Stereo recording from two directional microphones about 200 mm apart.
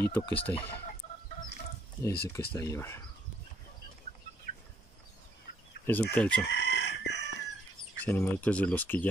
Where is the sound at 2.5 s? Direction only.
15° left (ahead or behind).